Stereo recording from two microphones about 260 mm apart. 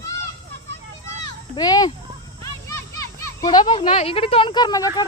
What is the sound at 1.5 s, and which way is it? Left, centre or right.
A child's voice, centre.